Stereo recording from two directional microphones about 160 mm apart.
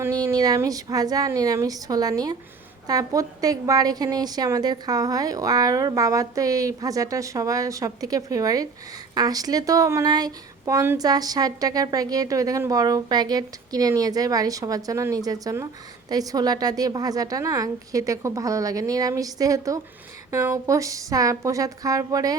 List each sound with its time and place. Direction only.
0.0 s speech: 20° right (ahead or behind)